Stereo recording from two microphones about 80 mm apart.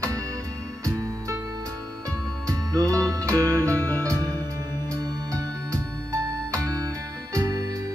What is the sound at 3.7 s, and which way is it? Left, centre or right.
Music, centre.